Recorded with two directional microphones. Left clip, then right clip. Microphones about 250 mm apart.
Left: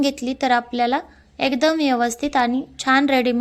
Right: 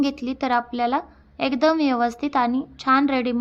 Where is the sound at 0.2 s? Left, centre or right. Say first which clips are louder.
Left 3 dB; left.